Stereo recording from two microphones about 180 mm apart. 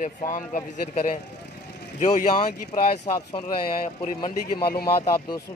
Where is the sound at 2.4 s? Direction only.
40° left (ahead or behind).